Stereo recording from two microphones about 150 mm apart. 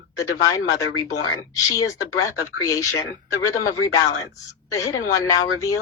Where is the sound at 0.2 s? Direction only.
20° left (ahead or behind).